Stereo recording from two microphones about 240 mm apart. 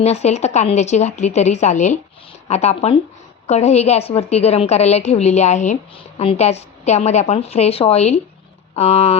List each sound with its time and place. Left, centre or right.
0.0 s a woman's voice: left